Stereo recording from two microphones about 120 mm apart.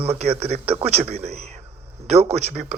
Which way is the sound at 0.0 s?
55° right (ahead or behind).